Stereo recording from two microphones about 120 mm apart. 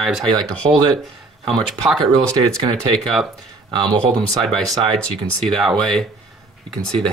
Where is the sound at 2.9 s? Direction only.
Centre (ahead or behind).